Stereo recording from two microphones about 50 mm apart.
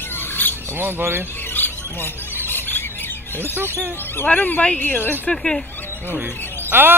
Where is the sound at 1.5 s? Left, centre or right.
Left.